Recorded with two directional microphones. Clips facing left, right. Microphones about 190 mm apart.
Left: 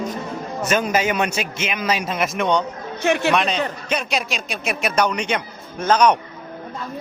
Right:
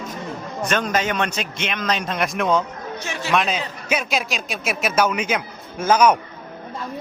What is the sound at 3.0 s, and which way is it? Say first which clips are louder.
Speech: left 13 dB; 60° left (ahead or behind).